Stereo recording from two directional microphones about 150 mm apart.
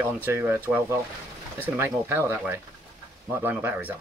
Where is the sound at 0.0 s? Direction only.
15° right (ahead or behind).